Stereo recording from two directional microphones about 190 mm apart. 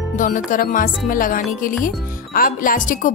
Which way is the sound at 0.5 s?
45° left (ahead or behind).